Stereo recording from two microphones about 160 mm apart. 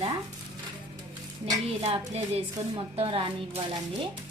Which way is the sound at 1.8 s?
40° right (ahead or behind).